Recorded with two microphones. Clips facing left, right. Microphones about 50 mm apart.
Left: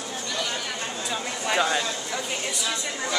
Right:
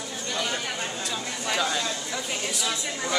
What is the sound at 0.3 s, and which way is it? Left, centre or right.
Chatter, centre.